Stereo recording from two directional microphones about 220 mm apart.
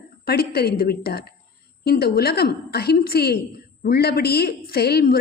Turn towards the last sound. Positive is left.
turn(degrees=45)  # may be behind; listen again after turning